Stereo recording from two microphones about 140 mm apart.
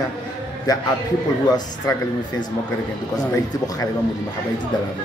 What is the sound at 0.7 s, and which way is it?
Speech, 25° left (ahead or behind).